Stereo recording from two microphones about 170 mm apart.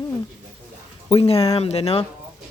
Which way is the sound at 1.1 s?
35° left (ahead or behind).